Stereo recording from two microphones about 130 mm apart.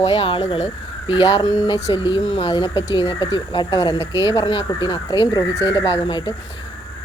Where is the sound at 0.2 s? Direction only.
45° left (ahead or behind).